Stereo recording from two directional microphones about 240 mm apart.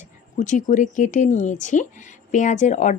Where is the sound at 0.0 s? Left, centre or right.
Left.